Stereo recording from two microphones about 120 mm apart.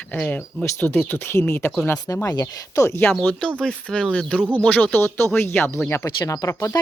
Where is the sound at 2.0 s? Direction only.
30° left (ahead or behind).